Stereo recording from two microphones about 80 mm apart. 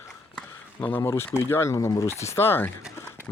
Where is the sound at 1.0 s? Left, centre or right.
Left.